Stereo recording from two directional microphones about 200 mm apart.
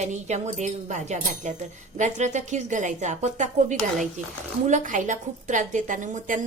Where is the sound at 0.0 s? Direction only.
35° right (ahead or behind).